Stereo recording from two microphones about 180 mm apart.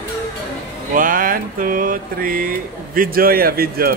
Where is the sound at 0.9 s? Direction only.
50° right (ahead or behind).